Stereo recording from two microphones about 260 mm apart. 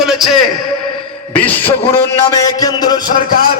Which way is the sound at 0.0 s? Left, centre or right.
Centre.